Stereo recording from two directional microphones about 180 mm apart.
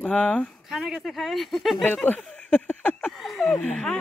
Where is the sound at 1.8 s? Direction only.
10° left (ahead or behind).